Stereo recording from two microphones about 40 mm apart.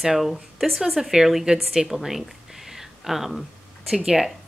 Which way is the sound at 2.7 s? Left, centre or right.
Centre.